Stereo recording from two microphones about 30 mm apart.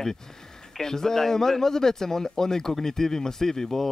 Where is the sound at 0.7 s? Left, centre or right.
Centre.